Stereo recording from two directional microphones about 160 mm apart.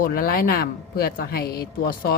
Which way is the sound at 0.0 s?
65° left (ahead or behind).